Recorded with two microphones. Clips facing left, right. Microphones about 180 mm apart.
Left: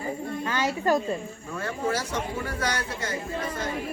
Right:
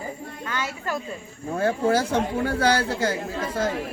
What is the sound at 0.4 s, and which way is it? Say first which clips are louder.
Snake: left 5 dB; 35° left (ahead or behind).